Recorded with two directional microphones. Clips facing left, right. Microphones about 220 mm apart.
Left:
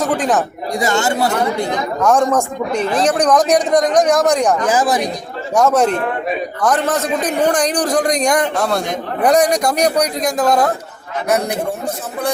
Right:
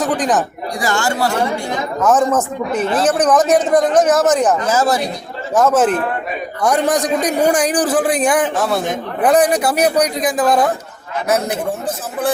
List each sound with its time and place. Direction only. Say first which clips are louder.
0.0 s speech: even; centre (ahead or behind)
0.8 s speech: left 2 dB; 20° left (ahead or behind)
2.0 s a man's voice: even; 5° right (ahead or behind)
4.6 s speech: even; 15° left (ahead or behind)
5.5 s a man's voice: even; centre (ahead or behind)